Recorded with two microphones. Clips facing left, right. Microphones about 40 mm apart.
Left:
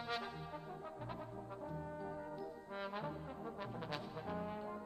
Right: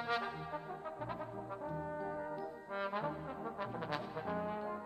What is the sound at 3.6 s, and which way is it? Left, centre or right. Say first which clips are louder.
Brass instrument: right 6 dB; centre.